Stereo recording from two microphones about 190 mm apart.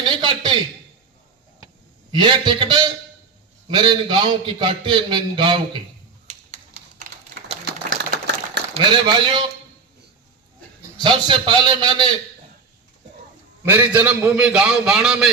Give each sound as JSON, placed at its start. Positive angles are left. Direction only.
{"t": 0.0, "sound": "a sound", "side_deg": -25}
{"t": 2.1, "sound": "a man's voice", "side_deg": -25}
{"t": 7.4, "sound": "a sound", "side_deg": -55}
{"t": 8.7, "sound": "a man's voice", "side_deg": -25}
{"t": 10.9, "sound": "a man's voice", "side_deg": -25}
{"t": 13.7, "sound": "a man's voice", "side_deg": -10}